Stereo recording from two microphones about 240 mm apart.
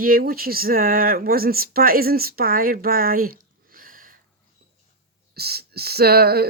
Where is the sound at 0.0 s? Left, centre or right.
Right.